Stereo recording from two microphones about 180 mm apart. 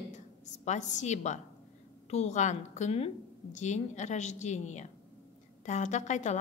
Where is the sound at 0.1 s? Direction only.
40° left (ahead or behind).